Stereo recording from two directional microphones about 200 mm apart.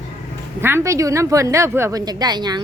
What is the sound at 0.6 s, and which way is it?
A woman's voice, 10° right (ahead or behind).